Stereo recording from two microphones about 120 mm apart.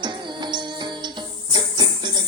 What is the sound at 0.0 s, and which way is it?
Music, 40° right (ahead or behind).